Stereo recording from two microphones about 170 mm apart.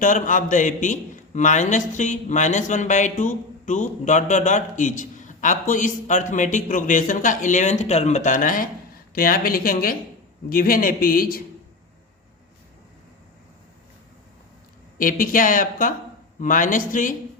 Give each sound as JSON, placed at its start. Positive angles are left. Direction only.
{"t": 0.0, "sound": "a man's voice", "side_deg": 50}
{"t": 14.9, "sound": "a man's voice", "side_deg": 55}